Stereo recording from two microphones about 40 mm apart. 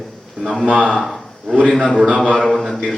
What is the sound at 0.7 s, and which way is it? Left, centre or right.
Speech, right.